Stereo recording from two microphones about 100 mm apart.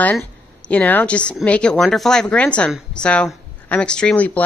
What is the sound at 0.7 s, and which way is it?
Speech, 15° left (ahead or behind).